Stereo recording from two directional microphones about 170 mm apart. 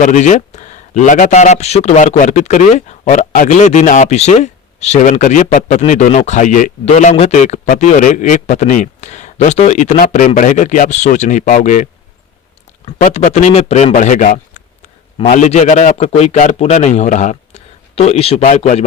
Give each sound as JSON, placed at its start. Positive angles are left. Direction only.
{"t": 0.0, "sound": "speech", "side_deg": 45}
{"t": 13.0, "sound": "speech", "side_deg": 45}